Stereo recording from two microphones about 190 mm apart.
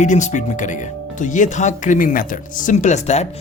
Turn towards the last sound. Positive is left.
turn(degrees=35)  # may be behind; listen again after turning